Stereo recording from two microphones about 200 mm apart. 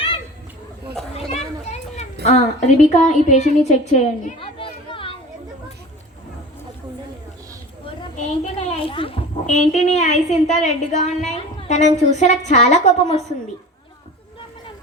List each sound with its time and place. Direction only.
1.3 s children playing: 35° left (ahead or behind)
2.2 s a woman's voice: 35° left (ahead or behind)
3.7 s a sound: 35° left (ahead or behind)
8.1 s a child's voice: 30° left (ahead or behind)